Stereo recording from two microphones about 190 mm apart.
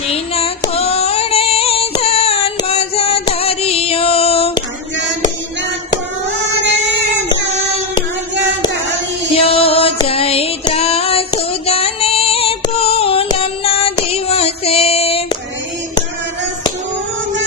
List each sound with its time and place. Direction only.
0.1 s music: 30° left (ahead or behind)
0.7 s female singing: 30° left (ahead or behind)
9.3 s music: 30° left (ahead or behind)
14.1 s child singing: 30° left (ahead or behind)